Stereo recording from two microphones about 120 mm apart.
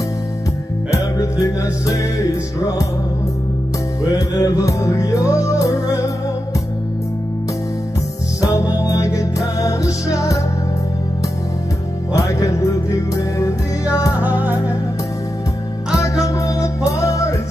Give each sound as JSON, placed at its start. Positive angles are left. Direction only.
{"t": 0.9, "sound": "music", "side_deg": 30}
{"t": 4.0, "sound": "music", "side_deg": 30}
{"t": 8.4, "sound": "music", "side_deg": 30}
{"t": 12.1, "sound": "music", "side_deg": 30}
{"t": 14.2, "sound": "music", "side_deg": -15}
{"t": 16.0, "sound": "music", "side_deg": 30}